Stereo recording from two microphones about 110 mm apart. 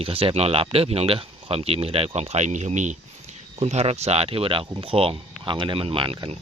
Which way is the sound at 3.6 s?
70° right (ahead or behind).